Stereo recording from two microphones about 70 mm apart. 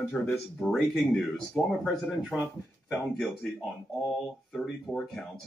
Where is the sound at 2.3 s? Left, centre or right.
Centre.